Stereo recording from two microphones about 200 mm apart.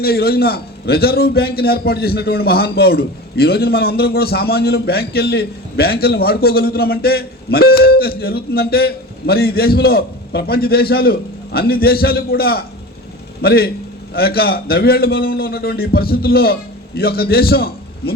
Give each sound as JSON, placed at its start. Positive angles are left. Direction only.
{"t": 0.0, "sound": "a man's voice", "side_deg": 50}